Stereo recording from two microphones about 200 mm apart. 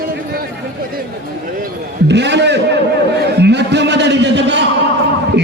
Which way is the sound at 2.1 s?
60° right (ahead or behind).